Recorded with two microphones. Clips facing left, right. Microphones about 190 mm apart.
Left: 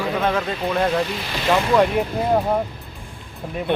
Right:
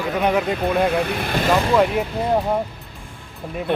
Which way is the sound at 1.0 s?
55° right (ahead or behind).